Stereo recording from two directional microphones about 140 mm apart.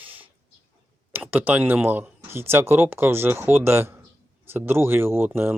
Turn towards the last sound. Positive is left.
turn(degrees=-15)  # may be behind; listen again after turning